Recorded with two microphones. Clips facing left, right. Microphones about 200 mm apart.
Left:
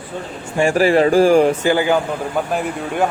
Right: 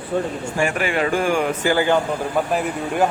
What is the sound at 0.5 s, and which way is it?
Speech, 30° left (ahead or behind).